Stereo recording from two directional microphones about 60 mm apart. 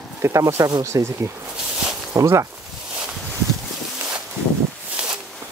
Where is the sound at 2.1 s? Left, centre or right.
Right.